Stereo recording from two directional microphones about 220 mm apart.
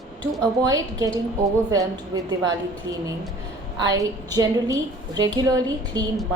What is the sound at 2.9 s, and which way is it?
Speech, 55° right (ahead or behind).